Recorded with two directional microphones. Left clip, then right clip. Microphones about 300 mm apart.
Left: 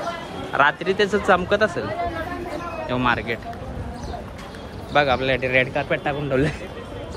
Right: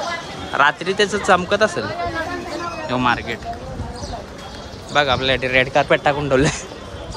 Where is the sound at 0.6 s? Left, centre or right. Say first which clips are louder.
Right 2 dB; centre.